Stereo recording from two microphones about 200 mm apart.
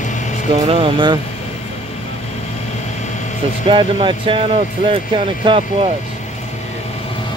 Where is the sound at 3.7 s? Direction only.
25° right (ahead or behind).